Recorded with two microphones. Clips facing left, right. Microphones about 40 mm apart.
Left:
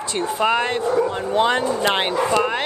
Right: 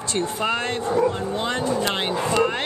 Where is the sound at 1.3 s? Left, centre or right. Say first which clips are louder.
Left 5 dB; left.